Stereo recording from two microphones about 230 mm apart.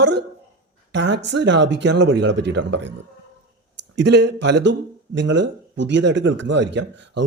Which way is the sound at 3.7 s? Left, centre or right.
Right.